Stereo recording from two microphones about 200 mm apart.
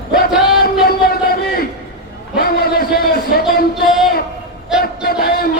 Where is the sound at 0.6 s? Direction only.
50° left (ahead or behind).